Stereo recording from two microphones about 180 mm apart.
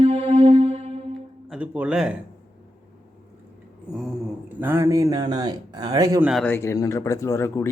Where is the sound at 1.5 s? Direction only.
5° right (ahead or behind).